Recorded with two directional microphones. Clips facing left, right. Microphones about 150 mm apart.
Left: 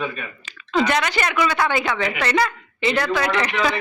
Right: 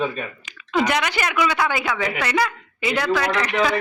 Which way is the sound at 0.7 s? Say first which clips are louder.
Left 1 dB; 10° right (ahead or behind).